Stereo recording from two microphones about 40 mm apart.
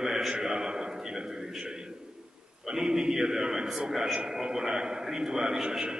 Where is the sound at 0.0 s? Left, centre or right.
Centre.